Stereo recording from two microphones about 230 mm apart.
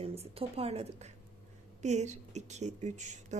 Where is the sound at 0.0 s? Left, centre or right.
Right.